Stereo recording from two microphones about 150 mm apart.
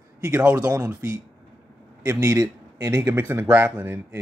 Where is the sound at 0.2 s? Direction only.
10° right (ahead or behind).